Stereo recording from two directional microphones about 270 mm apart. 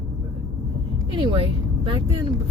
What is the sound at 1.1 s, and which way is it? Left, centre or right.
Speech, centre.